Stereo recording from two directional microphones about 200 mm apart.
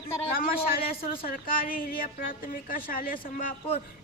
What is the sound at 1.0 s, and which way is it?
Speech, 30° left (ahead or behind).